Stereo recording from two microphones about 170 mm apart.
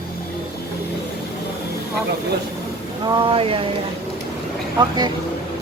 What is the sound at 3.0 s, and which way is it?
Speech, 30° right (ahead or behind).